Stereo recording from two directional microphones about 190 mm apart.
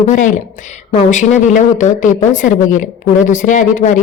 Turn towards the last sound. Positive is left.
turn(degrees=40)  # may be behind; listen again after turning